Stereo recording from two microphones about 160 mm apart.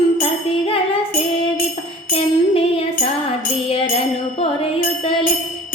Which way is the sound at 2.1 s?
35° left (ahead or behind).